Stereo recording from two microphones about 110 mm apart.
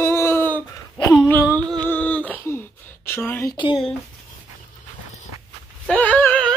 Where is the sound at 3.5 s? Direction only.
45° left (ahead or behind).